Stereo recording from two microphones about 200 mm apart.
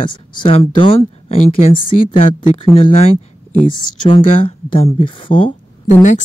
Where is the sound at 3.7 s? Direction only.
25° left (ahead or behind).